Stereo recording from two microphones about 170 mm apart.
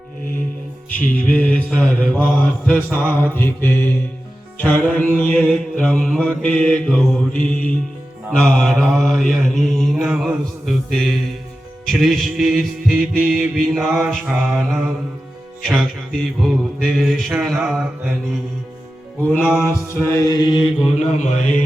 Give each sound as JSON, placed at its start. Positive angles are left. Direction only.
{"t": 1.1, "sound": "mantra", "side_deg": 10}
{"t": 6.8, "sound": "music", "side_deg": 5}
{"t": 19.4, "sound": "music", "side_deg": -5}
{"t": 19.9, "sound": "mantra", "side_deg": 15}
{"t": 20.3, "sound": "mantra", "side_deg": 25}
{"t": 20.8, "sound": "mantra", "side_deg": 45}